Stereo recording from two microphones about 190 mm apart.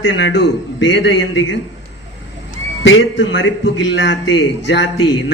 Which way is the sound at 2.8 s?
80° left.